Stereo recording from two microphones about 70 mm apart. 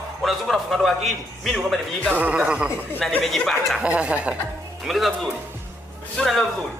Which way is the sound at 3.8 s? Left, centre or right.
Centre.